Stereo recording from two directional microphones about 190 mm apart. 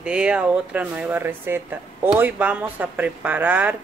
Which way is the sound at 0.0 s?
5° right (ahead or behind).